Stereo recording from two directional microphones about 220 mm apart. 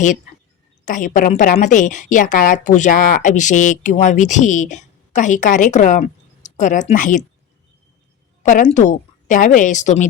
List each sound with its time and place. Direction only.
0.9 s a woman's voice: 35° left (ahead or behind)
8.4 s a woman's voice: 35° left (ahead or behind)